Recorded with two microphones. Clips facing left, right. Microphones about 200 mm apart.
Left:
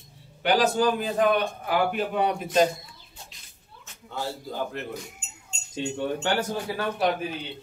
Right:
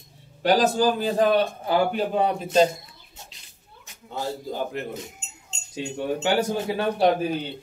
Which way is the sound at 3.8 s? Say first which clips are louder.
Right 2 dB; 20° right (ahead or behind).